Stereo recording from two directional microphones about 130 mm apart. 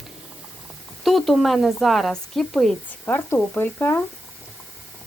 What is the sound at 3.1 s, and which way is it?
Speech, 15° left (ahead or behind).